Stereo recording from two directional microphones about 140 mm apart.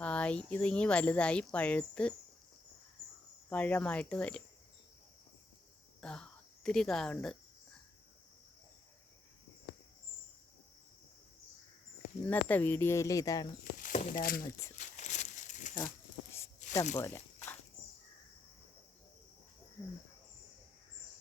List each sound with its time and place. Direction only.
0.0 s speech: 10° left (ahead or behind)
3.5 s speech: 10° left (ahead or behind)
6.0 s speech: 5° left (ahead or behind)
12.2 s speech: 10° left (ahead or behind)
13.8 s speech: 70° left (ahead or behind); by 14.4 s 90° left
14.9 s crumpling: 55° left (ahead or behind)
16.6 s zipper: 60° left (ahead or behind)
17.0 s a sound: 15° left (ahead or behind)